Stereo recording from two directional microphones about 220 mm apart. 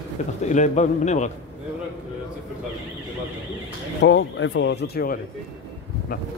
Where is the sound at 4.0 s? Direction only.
55° left (ahead or behind).